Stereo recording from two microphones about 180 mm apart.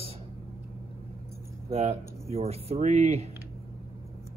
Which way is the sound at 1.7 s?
35° right (ahead or behind).